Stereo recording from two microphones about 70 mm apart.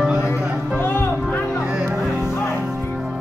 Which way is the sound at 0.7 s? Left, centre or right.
Left.